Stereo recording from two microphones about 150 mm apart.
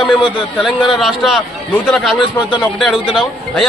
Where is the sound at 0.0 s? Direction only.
35° left (ahead or behind).